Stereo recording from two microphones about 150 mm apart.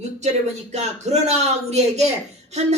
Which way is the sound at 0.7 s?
45° right (ahead or behind).